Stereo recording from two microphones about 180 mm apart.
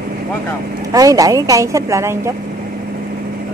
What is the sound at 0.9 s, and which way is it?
A woman's voice, 20° right (ahead or behind).